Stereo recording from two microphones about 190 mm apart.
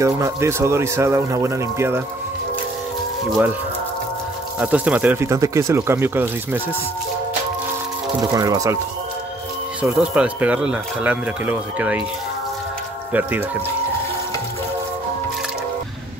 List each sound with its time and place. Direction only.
0.0 s speech: 15° right (ahead or behind)
4.6 s speech: 5° right (ahead or behind)
8.2 s speech: 20° right (ahead or behind)
9.8 s speech: 5° right (ahead or behind)
13.1 s speech: 10° right (ahead or behind)